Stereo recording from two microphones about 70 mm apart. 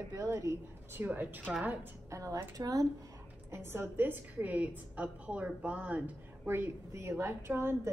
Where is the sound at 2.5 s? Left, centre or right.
Right.